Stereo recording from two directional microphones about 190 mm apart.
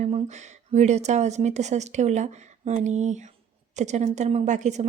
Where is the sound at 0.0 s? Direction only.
40° right (ahead or behind).